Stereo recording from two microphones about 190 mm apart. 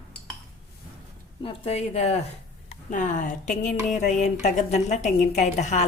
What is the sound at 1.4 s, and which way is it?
A woman's voice, 30° left (ahead or behind).